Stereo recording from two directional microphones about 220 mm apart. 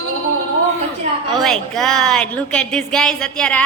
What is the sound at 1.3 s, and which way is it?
A woman's voice, centre (ahead or behind).